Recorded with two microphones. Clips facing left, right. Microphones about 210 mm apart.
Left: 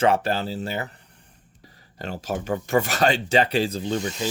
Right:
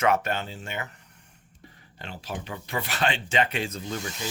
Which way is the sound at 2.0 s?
40° left (ahead or behind).